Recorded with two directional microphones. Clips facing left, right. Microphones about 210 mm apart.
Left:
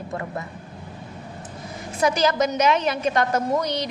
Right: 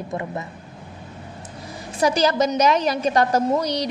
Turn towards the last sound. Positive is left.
turn(degrees=-35)  # may be behind; listen again after turning